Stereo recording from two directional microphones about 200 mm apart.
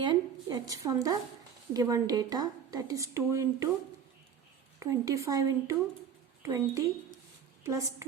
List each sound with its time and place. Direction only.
0.0 s a sound: 20° right (ahead or behind)
0.7 s a woman's voice: 15° right (ahead or behind)
4.8 s a woman's voice: 15° right (ahead or behind)